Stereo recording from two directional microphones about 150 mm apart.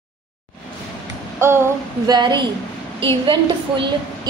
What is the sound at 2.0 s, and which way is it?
A woman's voice, 30° right (ahead or behind).